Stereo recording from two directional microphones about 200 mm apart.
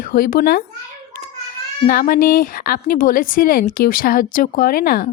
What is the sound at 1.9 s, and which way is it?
A woman's voice, 45° left (ahead or behind).